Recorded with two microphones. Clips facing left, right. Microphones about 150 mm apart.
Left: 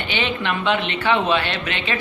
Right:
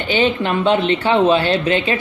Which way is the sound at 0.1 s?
35° right (ahead or behind).